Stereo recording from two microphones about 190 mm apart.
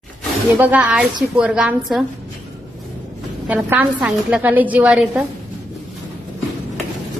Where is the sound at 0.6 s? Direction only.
5° right (ahead or behind).